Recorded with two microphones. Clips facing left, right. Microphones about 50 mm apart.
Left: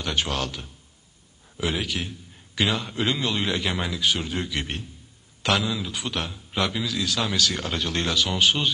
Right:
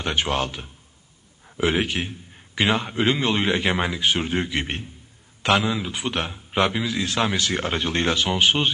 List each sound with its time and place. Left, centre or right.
0.0 s a man's voice: right